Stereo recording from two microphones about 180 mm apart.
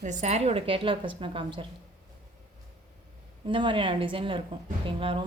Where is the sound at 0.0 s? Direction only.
40° right (ahead or behind).